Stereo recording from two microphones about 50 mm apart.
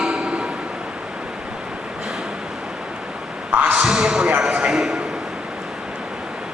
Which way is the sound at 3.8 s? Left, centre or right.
Centre.